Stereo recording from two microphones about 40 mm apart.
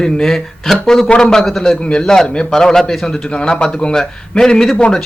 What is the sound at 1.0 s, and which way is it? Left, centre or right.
A man's voice, left.